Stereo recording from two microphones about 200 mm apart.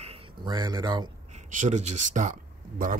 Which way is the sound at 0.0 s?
30° right (ahead or behind).